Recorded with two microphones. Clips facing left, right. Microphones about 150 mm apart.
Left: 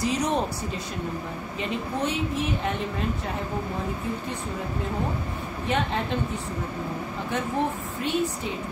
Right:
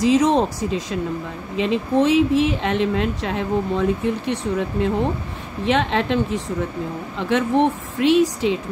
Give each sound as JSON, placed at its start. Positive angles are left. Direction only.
{"t": 0.0, "sound": "a woman's voice", "side_deg": -90}